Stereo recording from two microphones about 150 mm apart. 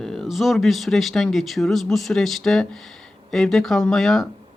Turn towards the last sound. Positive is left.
turn(degrees=0)  # may be behind; listen again after turning